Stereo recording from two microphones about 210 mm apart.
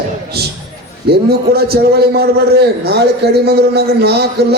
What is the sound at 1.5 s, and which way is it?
A man's voice, 50° right (ahead or behind).